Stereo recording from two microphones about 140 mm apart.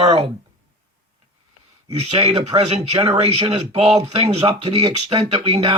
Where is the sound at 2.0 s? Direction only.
45° right (ahead or behind).